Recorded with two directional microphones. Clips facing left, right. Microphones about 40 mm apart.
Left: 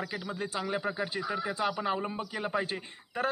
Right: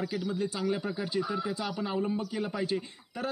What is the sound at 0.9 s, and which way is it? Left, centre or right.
A man's voice, left.